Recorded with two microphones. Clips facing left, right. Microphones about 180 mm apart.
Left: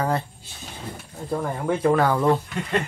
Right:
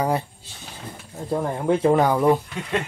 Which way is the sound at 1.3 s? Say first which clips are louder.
Right 3 dB; 20° right (ahead or behind).